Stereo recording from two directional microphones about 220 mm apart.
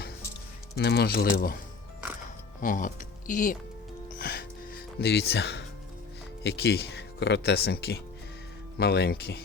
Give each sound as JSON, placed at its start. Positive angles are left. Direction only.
{"t": 0.8, "sound": "speech", "side_deg": 45}
{"t": 2.6, "sound": "speech", "side_deg": 35}
{"t": 4.1, "sound": "music", "side_deg": 45}
{"t": 6.4, "sound": "speech", "side_deg": 50}